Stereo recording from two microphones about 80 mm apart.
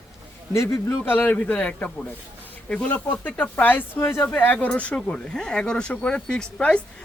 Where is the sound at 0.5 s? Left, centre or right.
Left.